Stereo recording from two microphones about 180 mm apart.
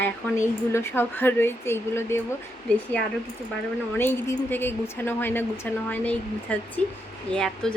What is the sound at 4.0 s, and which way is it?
Speech, 10° left (ahead or behind).